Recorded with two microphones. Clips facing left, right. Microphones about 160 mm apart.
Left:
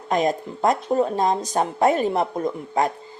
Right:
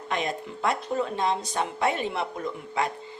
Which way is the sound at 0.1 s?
40° left (ahead or behind).